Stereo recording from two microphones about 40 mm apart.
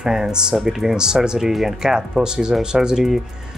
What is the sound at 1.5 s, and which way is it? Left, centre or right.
Speech, centre.